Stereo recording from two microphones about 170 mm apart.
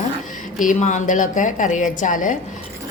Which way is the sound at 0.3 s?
50° left (ahead or behind).